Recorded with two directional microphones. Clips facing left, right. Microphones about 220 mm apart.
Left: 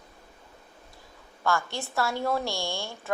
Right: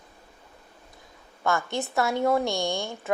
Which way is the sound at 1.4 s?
20° right (ahead or behind).